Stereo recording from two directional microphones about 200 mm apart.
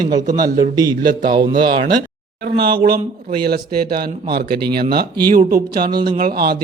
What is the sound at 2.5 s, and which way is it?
A man's voice, 55° right (ahead or behind).